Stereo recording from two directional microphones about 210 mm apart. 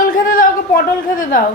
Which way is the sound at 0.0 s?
40° left (ahead or behind).